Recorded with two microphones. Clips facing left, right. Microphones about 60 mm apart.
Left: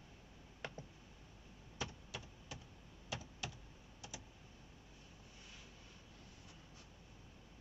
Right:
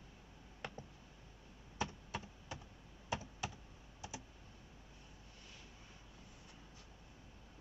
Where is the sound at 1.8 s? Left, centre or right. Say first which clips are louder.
Right 5 dB; right.